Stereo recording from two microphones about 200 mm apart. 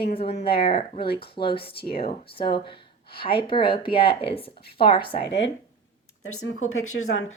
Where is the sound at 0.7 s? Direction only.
30° left (ahead or behind).